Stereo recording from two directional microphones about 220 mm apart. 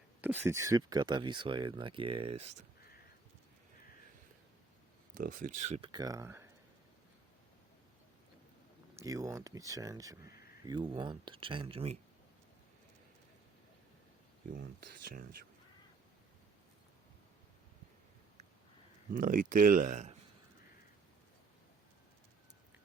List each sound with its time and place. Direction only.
0.2 s speech: 10° right (ahead or behind); by 2.5 s 25° right (ahead or behind)
5.1 s speech: 40° right (ahead or behind); by 6.5 s 10° right (ahead or behind)
9.0 s speech: 15° right (ahead or behind)
14.5 s speech: 40° right (ahead or behind)
19.1 s speech: 35° right (ahead or behind)